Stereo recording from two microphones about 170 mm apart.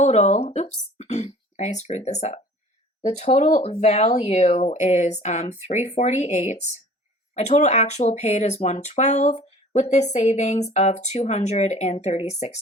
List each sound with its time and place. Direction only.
0.0 s speech: 40° left (ahead or behind)